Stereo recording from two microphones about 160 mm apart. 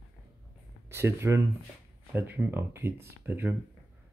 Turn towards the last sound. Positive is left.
turn(degrees=-15)  # may be behind; listen again after turning